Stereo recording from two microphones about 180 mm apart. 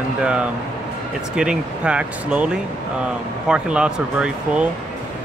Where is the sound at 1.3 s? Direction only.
5° right (ahead or behind).